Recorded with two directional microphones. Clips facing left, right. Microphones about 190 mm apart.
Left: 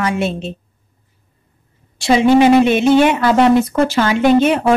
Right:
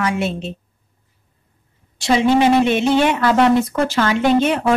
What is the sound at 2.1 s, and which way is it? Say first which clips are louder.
A woman's voice: left 4 dB; 10° left (ahead or behind).